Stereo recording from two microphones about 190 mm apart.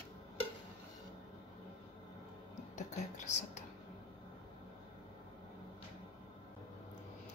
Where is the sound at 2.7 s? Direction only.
40° left (ahead or behind).